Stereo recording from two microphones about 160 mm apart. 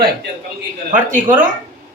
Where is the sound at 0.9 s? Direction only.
55° right (ahead or behind).